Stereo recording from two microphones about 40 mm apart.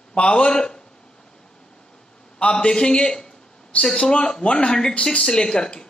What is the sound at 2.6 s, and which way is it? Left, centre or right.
A man's voice, left.